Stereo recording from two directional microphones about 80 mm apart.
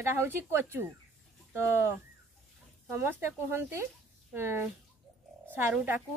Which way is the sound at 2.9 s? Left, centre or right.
Right.